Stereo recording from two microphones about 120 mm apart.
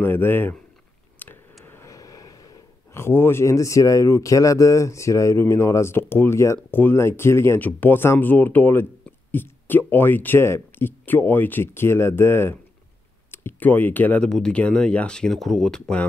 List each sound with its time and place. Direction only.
0.0 s speech: 15° left (ahead or behind)
1.2 s a sound: 15° left (ahead or behind)
1.6 s speech: 25° left (ahead or behind); by 16.1 s 5° left (ahead or behind)